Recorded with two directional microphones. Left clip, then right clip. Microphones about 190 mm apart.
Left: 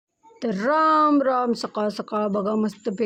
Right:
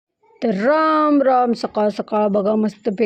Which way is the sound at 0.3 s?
20° right (ahead or behind).